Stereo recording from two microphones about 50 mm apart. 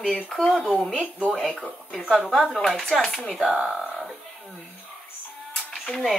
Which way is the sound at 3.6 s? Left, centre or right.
Centre.